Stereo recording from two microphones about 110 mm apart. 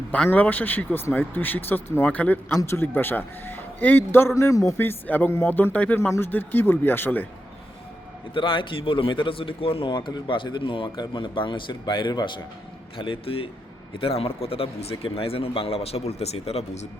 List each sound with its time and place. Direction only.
0.1 s a man's voice: 15° left (ahead or behind)
8.3 s a man's voice: 50° left (ahead or behind)
13.0 s a man's voice: 55° left (ahead or behind); by 16.9 s 80° left